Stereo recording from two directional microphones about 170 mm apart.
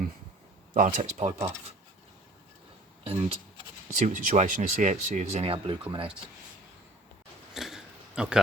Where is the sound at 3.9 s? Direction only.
50° right (ahead or behind); by 5.7 s 35° right (ahead or behind).